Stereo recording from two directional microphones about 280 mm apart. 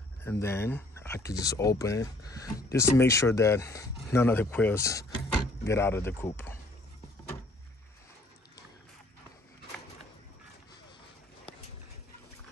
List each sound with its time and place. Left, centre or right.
0.2 s speech: centre